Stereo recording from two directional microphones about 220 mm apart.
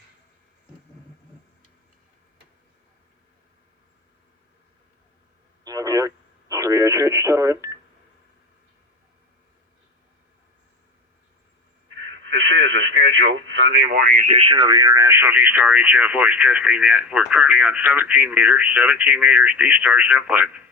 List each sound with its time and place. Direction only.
5.6 s radio: 15° right (ahead or behind)
12.3 s speech: 55° right (ahead or behind); by 20.6 s 5° right (ahead or behind)